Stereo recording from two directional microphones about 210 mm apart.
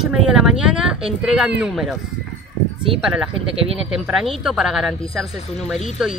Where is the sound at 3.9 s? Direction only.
Centre (ahead or behind).